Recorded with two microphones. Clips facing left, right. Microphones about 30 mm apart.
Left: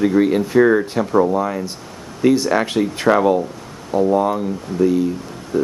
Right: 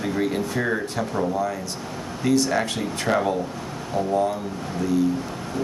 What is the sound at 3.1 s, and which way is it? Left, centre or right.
Speech, left.